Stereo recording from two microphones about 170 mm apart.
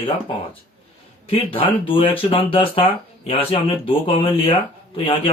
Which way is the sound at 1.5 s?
30° left (ahead or behind).